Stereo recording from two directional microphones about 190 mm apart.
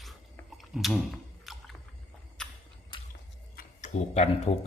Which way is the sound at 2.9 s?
25° left (ahead or behind).